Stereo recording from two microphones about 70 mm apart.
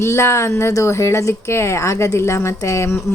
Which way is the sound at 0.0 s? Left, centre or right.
Left.